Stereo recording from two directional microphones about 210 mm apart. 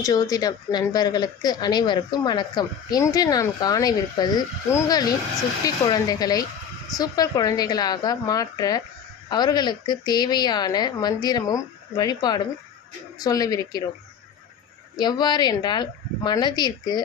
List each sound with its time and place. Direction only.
0.0 s a woman's voice: 15° left (ahead or behind)
14.9 s a woman's voice: 20° left (ahead or behind)